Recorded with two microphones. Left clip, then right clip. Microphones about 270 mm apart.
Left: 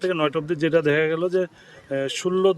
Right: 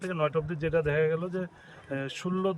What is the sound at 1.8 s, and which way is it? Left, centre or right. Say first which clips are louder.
Speech: left 10 dB; left.